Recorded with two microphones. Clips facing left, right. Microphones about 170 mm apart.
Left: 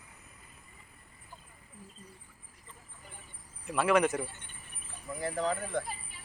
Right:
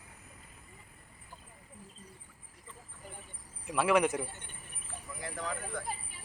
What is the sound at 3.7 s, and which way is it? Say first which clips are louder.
Speech: left 1 dB; 10° right (ahead or behind).